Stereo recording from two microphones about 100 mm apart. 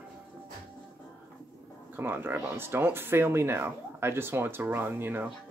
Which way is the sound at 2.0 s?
20° right (ahead or behind).